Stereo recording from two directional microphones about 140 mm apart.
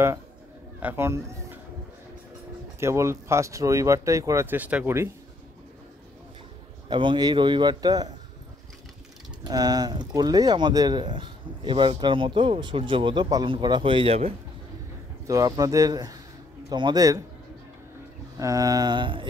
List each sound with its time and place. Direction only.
0.7 s speech: 15° right (ahead or behind)
2.8 s speech: 20° right (ahead or behind)
6.9 s speech: 35° right (ahead or behind)
9.5 s speech: 30° right (ahead or behind); by 14.3 s 45° right (ahead or behind)
15.2 s speech: 25° right (ahead or behind)
18.4 s speech: 25° right (ahead or behind)